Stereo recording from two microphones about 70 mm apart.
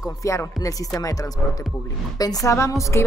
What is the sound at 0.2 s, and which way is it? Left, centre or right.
Speech, left.